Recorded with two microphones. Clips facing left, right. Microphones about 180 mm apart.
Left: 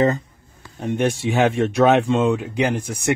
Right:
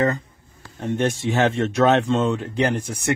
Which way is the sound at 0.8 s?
10° left (ahead or behind).